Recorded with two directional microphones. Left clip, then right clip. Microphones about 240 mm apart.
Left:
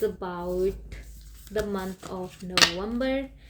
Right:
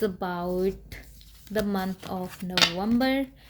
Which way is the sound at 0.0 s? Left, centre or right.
Right.